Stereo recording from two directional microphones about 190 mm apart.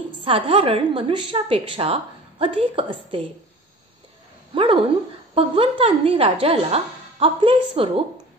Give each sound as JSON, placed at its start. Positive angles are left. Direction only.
{"t": 0.2, "sound": "a woman's voice", "side_deg": -30}
{"t": 5.3, "sound": "a woman's voice", "side_deg": -30}